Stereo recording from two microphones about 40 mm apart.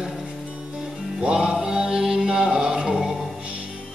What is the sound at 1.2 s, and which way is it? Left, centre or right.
Mantra, right.